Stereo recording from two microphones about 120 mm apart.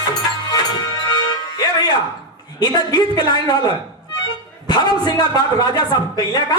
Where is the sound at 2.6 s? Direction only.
35° left (ahead or behind).